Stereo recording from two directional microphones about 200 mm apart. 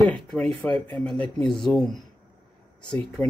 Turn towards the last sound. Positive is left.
turn(degrees=5)  # may be behind; listen again after turning